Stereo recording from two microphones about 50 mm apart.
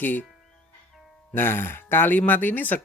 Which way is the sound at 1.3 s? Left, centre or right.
Left.